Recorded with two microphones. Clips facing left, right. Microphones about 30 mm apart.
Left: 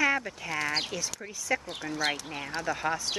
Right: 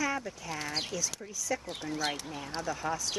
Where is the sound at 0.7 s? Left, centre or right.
Left.